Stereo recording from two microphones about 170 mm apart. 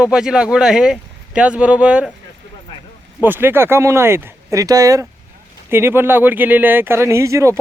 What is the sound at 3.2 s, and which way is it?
Speech, 10° right (ahead or behind).